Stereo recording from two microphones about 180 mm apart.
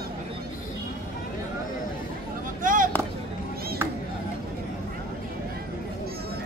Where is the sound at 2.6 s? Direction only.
50° right (ahead or behind).